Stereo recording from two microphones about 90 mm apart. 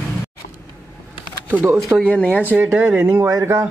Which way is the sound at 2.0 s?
15° left (ahead or behind).